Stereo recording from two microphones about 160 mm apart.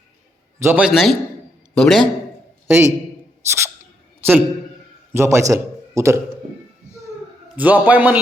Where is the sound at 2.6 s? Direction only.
15° right (ahead or behind).